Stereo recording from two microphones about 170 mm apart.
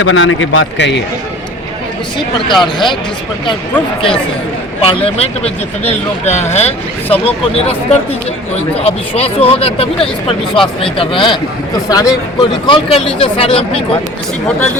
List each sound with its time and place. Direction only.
0.0 s a man's voice: 90° left
2.1 s speech: 25° left (ahead or behind)
4.8 s speech: 35° left (ahead or behind)